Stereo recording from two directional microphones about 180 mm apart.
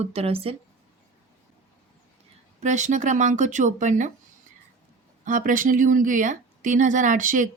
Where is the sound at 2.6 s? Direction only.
40° right (ahead or behind).